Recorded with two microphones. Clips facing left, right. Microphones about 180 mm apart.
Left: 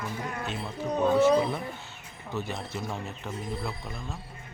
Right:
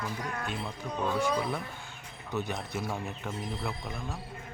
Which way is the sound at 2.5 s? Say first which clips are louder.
Even; 5° right (ahead or behind).